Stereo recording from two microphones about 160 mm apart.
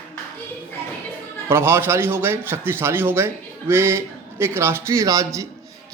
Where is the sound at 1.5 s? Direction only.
15° right (ahead or behind).